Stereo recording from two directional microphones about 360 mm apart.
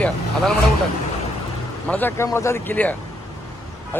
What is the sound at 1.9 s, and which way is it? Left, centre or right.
A man's voice, centre.